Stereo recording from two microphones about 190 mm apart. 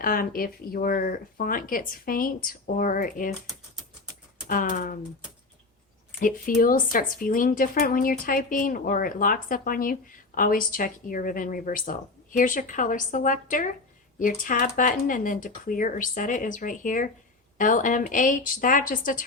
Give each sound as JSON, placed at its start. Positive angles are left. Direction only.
{"t": 0.0, "sound": "a woman's voice", "side_deg": 50}
{"t": 4.4, "sound": "a woman's voice", "side_deg": 45}
{"t": 6.1, "sound": "a woman's voice", "side_deg": 45}